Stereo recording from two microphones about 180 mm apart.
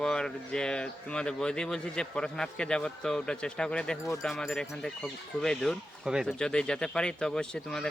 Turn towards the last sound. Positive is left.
turn(degrees=5)  # may be behind; listen again after turning